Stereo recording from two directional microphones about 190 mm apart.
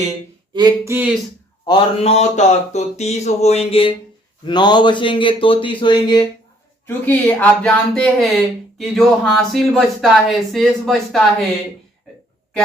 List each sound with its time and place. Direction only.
0.5 s a sound: 20° right (ahead or behind)
1.6 s a man's voice: 25° left (ahead or behind)
6.8 s speech: 10° left (ahead or behind)